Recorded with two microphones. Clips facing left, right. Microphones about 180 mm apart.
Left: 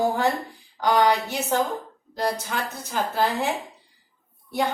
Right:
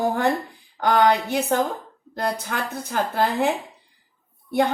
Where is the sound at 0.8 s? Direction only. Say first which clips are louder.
Right 2 dB; 55° right (ahead or behind).